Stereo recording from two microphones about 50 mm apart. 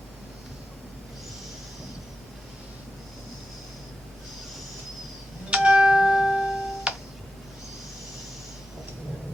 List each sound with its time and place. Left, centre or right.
5.5 s music: right